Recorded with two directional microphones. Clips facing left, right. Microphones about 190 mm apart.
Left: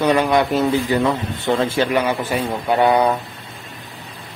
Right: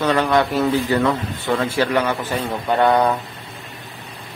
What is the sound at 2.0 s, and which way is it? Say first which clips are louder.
Speech: left 1 dB; 10° left (ahead or behind).